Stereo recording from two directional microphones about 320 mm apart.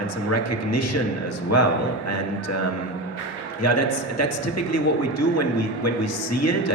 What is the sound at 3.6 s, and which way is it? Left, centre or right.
Speech, left.